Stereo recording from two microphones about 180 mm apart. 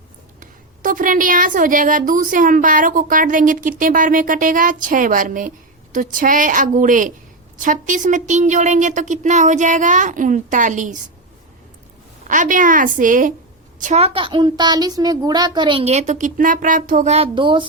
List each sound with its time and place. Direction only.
0.3 s a woman's voice: 50° right (ahead or behind)
12.3 s a woman's voice: 45° right (ahead or behind); by 17.7 s 25° right (ahead or behind)